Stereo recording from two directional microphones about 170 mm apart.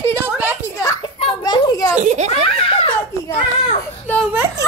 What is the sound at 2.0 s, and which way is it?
Speech, 40° right (ahead or behind).